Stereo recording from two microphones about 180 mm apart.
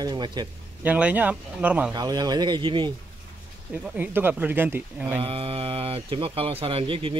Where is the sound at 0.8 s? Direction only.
10° right (ahead or behind).